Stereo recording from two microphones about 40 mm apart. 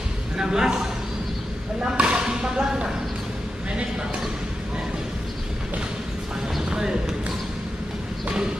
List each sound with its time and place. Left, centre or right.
0.4 s a man's voice: centre
2.0 s a sound: right
6.7 s basketball bounce: centre